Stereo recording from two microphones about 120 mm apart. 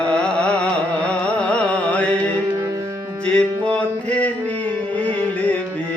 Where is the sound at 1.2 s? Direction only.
10° left (ahead or behind).